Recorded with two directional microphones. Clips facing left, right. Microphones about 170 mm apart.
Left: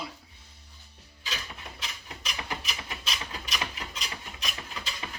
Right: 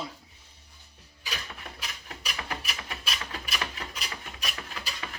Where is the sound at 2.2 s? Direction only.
5° right (ahead or behind).